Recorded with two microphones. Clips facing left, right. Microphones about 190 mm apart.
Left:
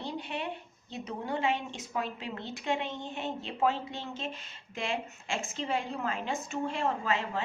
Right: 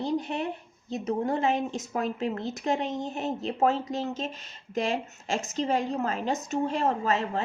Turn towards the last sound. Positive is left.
turn(degrees=-40)  # may be behind; listen again after turning